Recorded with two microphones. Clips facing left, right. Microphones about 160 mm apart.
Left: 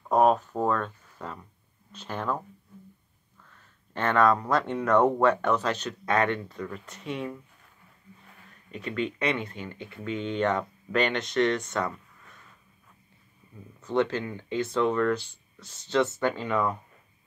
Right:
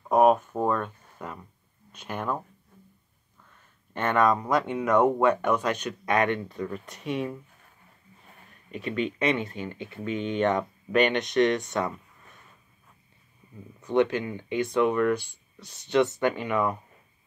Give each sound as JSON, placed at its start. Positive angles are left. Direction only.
{"t": 0.1, "sound": "speech", "side_deg": -10}
{"t": 3.9, "sound": "speech", "side_deg": -10}
{"t": 8.7, "sound": "speech", "side_deg": -20}
{"t": 13.7, "sound": "speech", "side_deg": -15}